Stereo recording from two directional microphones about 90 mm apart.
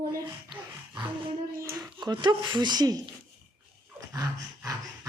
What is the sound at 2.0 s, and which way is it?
Speech, 55° right (ahead or behind).